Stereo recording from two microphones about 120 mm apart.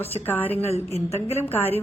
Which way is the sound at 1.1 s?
60° left (ahead or behind).